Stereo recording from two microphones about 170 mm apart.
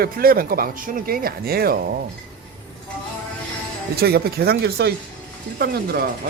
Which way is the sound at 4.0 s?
70° right (ahead or behind).